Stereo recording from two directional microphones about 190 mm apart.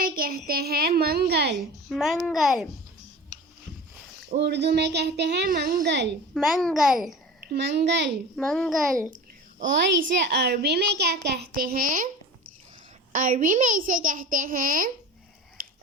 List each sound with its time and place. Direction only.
0.0 s a child's voice: 50° right (ahead or behind)
1.9 s a child's voice: centre (ahead or behind)
4.3 s a child's voice: 60° right (ahead or behind)
6.3 s a child's voice: centre (ahead or behind)
7.4 s a child's voice: 60° right (ahead or behind)
8.4 s a child's voice: 5° left (ahead or behind)
10.2 s a child's voice: 60° right (ahead or behind); by 12.0 s 45° right (ahead or behind)
13.1 s a child's voice: 45° right (ahead or behind)